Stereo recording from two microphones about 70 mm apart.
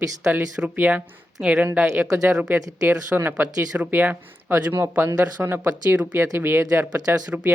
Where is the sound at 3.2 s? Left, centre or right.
Right.